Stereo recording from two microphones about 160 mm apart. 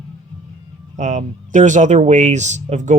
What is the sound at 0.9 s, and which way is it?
Speech, 45° right (ahead or behind).